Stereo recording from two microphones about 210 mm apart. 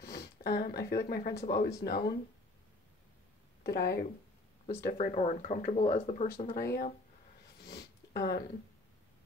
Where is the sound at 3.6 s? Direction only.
50° left (ahead or behind).